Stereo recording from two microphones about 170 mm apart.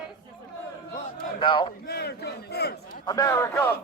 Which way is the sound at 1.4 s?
30° left (ahead or behind).